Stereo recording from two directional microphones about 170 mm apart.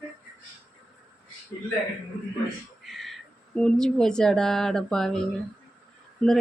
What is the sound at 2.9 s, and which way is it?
Speech, centre (ahead or behind).